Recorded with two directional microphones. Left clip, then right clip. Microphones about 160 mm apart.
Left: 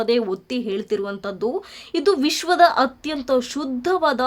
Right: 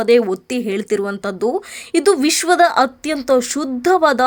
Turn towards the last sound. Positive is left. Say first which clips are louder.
# right 6 dB
turn(degrees=-25)  # may be behind; listen again after turning